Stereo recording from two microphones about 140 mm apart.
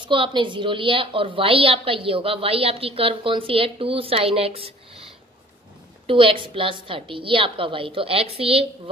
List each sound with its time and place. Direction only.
0.0 s a woman's voice: 35° right (ahead or behind)